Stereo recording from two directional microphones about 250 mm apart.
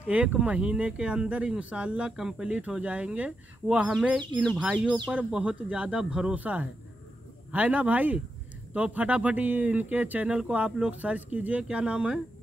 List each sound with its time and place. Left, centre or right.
0.1 s speech: centre